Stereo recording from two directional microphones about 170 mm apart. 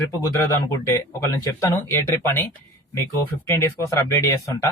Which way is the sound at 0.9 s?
20° left (ahead or behind).